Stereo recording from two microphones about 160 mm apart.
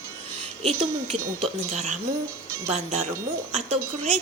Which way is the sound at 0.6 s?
40° right (ahead or behind).